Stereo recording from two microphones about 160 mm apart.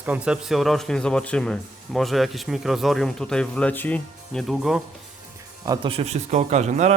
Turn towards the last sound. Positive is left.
turn(degrees=-45)  # may be behind; listen again after turning